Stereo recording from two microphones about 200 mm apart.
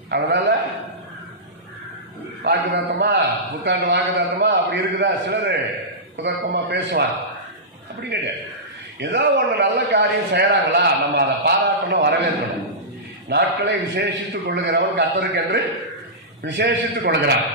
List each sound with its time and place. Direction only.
0.1 s a man's voice: 55° right (ahead or behind)
2.4 s a man's voice: 55° right (ahead or behind)
8.1 s a man's voice: 60° right (ahead or behind)
13.3 s a man's voice: 60° right (ahead or behind)